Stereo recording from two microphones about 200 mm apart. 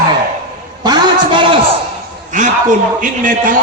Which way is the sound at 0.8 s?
25° right (ahead or behind).